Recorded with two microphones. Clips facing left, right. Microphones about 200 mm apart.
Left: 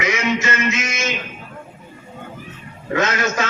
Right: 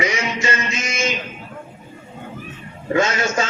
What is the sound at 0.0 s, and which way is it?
Music, 30° right (ahead or behind).